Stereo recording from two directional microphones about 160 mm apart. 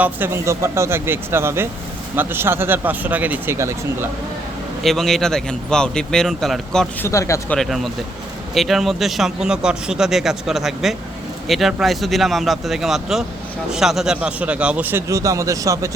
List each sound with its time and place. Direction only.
0.0 s a man's voice: 15° right (ahead or behind)
4.8 s speech: centre (ahead or behind)
7.0 s speech: 20° left (ahead or behind)
7.5 s a man's voice: centre (ahead or behind); by 15.9 s 20° right (ahead or behind)